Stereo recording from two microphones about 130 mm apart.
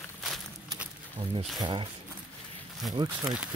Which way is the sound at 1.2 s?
45° right (ahead or behind).